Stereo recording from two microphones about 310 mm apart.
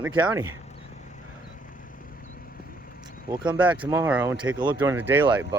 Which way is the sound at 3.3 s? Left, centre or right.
Centre.